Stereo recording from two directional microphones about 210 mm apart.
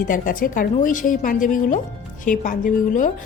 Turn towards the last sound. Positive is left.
turn(degrees=40)  # may be behind; listen again after turning